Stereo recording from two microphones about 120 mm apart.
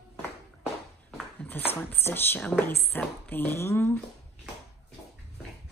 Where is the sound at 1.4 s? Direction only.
15° left (ahead or behind).